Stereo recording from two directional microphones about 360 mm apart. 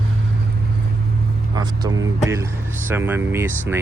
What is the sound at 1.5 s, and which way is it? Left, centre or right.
Speech, centre.